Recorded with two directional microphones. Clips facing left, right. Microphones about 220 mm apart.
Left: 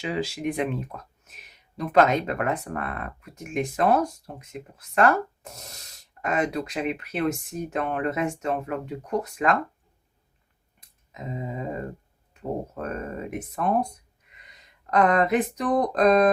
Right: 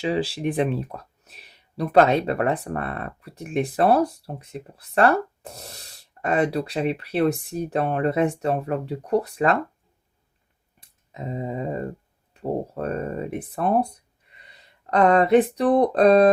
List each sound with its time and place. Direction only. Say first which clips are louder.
0.0 s speech: right 4 dB; 30° right (ahead or behind)
11.1 s speech: right 4 dB; 35° right (ahead or behind)
14.3 s a sound: right 3 dB; 30° right (ahead or behind)
15.8 s speech: right 3 dB; 30° right (ahead or behind)